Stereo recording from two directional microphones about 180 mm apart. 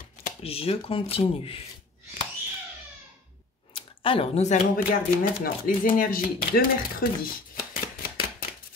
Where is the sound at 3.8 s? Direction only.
30° left (ahead or behind).